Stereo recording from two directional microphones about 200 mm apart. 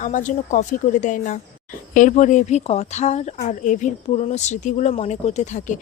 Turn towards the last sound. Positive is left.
turn(degrees=35)  # may be behind; listen again after turning